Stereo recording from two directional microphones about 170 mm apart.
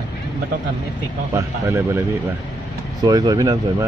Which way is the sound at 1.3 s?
15° right (ahead or behind).